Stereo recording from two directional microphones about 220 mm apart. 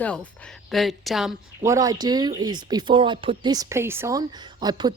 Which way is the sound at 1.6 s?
15° right (ahead or behind).